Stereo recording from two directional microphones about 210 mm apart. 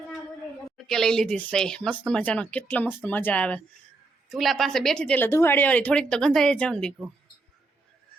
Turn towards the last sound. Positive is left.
turn(degrees=5)  # may be behind; listen again after turning